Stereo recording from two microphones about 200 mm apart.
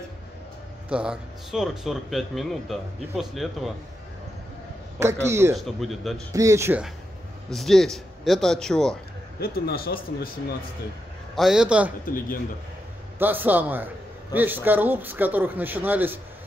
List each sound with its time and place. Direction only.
0.8 s speech: 5° right (ahead or behind)
4.9 s a man's voice: 15° right (ahead or behind)
5.6 s speech: centre (ahead or behind)
6.3 s a man's voice: 15° right (ahead or behind)
7.4 s speech: centre (ahead or behind)
9.4 s speech: 50° left (ahead or behind)
11.3 s speech: centre (ahead or behind)
13.2 s a man's voice: 10° right (ahead or behind)